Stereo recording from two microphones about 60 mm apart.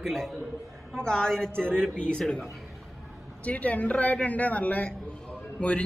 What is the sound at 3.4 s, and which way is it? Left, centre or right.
Speech, left.